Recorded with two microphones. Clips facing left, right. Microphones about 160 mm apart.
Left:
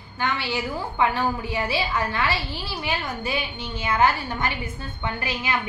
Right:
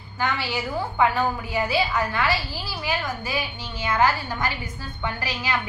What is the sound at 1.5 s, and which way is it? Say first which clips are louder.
A woman's voice: right 2 dB; 25° left (ahead or behind).